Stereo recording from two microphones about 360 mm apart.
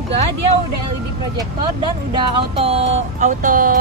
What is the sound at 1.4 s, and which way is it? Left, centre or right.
Speech, centre.